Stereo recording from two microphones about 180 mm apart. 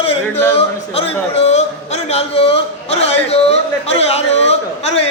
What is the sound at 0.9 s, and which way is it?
A man's voice, 35° left (ahead or behind).